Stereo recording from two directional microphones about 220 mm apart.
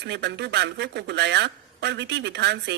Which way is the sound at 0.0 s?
50° right (ahead or behind).